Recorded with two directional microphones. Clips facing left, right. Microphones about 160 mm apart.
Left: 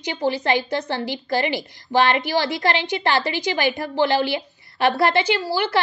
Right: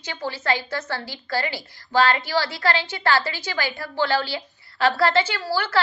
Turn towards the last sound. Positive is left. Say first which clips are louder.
# left 4 dB
turn(degrees=15)  # may be behind; listen again after turning